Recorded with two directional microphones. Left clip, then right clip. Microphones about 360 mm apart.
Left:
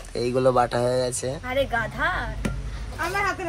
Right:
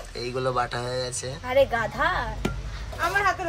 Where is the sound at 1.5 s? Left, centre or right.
Centre.